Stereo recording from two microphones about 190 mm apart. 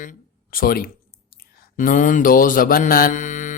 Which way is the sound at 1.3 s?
45° left (ahead or behind).